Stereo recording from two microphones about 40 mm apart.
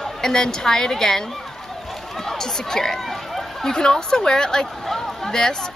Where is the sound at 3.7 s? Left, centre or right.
Centre.